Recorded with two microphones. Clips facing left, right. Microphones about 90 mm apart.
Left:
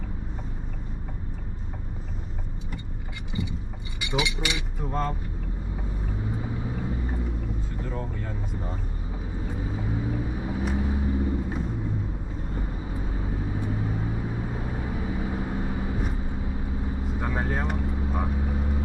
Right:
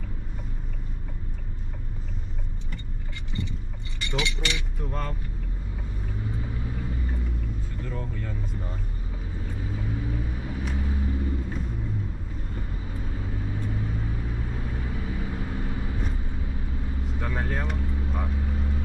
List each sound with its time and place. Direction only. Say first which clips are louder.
3.3 s vehicle: left 2 dB; 15° left (ahead or behind)
4.0 s speech: left 2 dB; 10° left (ahead or behind)
6.4 s vehicle: left 3 dB; 15° left (ahead or behind)
12.5 s vehicle: left 4 dB; 15° left (ahead or behind)